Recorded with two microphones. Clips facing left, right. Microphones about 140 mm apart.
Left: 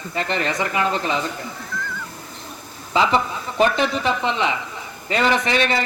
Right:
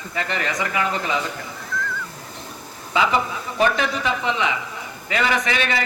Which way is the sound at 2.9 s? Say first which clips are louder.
Left 2 dB; 30° left (ahead or behind).